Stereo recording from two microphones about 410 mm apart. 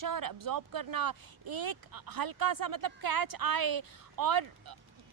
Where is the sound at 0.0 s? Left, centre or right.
Right.